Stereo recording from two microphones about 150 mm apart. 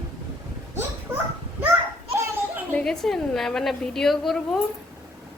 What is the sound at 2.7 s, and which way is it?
A child's voice, centre (ahead or behind).